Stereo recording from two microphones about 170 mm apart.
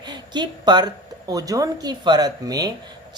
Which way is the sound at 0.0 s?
25° right (ahead or behind).